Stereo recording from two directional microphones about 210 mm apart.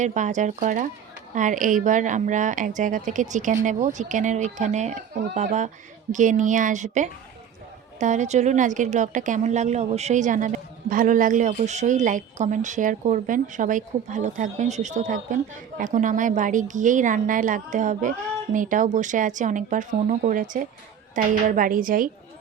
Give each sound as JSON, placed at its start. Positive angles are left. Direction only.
{"t": 0.0, "sound": "a woman's voice", "side_deg": -35}